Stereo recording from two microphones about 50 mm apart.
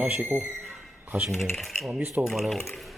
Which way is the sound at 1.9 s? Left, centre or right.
Right.